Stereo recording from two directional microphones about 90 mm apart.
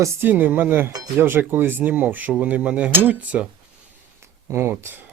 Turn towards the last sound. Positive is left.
turn(degrees=-25)  # may be behind; listen again after turning